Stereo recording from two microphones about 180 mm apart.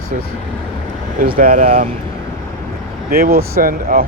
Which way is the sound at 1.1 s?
55° right (ahead or behind).